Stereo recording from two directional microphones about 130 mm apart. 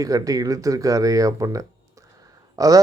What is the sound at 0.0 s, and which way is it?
Speech, 25° right (ahead or behind).